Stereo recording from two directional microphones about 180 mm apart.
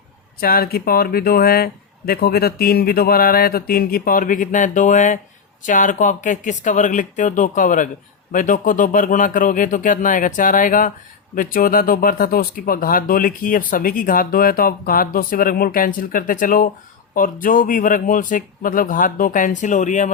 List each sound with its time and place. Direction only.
0.3 s speech: 55° left (ahead or behind)